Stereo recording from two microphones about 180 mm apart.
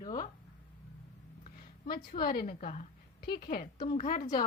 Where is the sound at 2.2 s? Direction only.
55° left (ahead or behind).